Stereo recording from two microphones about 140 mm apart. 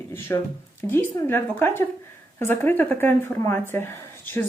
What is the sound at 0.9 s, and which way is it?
Speech, 15° left (ahead or behind).